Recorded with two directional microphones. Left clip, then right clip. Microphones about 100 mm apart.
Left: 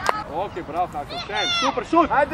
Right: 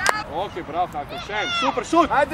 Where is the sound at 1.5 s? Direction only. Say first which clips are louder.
Left 1 dB; 20° left (ahead or behind).